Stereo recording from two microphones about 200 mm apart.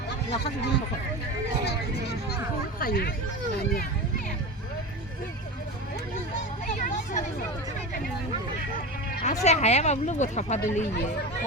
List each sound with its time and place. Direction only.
0.3 s speech: 60° left (ahead or behind)
2.7 s speech: 50° left (ahead or behind)
6.7 s speech: 35° left (ahead or behind)
9.2 s speech: 35° left (ahead or behind)